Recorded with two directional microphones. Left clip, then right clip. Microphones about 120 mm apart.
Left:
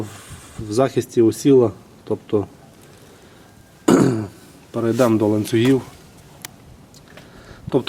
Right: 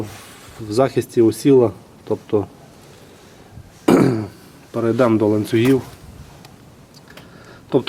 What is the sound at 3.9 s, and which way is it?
Throat clearing, 25° left (ahead or behind).